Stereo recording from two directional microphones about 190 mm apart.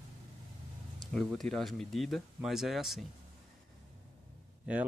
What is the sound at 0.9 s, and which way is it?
Speech, centre (ahead or behind).